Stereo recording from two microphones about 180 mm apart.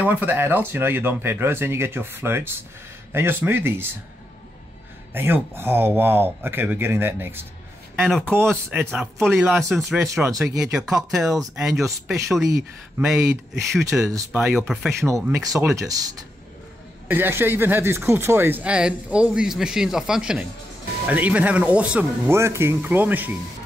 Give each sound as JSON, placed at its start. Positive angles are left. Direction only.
{"t": 0.0, "sound": "speech", "side_deg": -10}
{"t": 5.1, "sound": "speech", "side_deg": -10}
{"t": 9.6, "sound": "speech", "side_deg": 0}
{"t": 15.0, "sound": "speech", "side_deg": -15}